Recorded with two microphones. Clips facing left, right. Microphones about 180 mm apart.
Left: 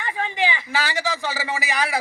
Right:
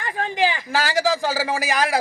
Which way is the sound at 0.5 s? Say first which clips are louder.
Right 4 dB; 45° right (ahead or behind).